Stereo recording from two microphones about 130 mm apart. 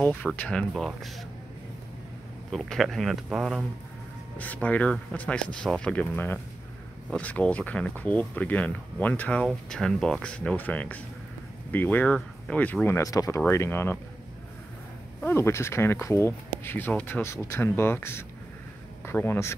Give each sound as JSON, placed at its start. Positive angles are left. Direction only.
{"t": 0.0, "sound": "speech", "side_deg": 15}
{"t": 2.5, "sound": "speech", "side_deg": 0}
{"t": 4.4, "sound": "speech", "side_deg": 10}
{"t": 12.8, "sound": "speech", "side_deg": 25}
{"t": 15.1, "sound": "a man's voice", "side_deg": 15}